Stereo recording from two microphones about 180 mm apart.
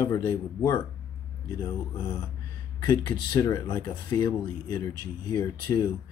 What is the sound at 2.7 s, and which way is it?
Speech, 25° left (ahead or behind).